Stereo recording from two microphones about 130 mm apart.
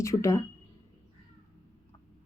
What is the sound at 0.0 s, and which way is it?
Speech, 25° left (ahead or behind).